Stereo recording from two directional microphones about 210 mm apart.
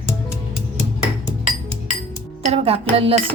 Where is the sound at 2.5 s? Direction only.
30° right (ahead or behind).